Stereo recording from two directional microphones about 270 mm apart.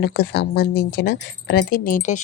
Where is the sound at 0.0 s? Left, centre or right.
Left.